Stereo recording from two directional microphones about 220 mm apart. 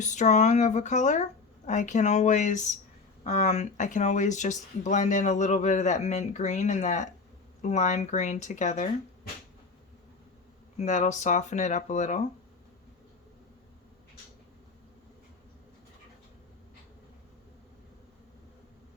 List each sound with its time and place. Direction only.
0.0 s speech: 35° left (ahead or behind)
10.8 s speech: 35° left (ahead or behind)